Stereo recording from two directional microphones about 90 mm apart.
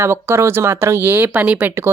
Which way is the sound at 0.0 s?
30° right (ahead or behind).